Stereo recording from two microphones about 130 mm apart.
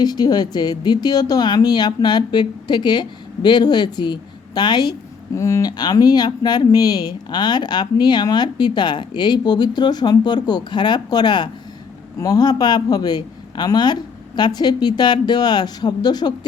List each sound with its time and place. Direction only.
0.0 s speech: 30° left (ahead or behind)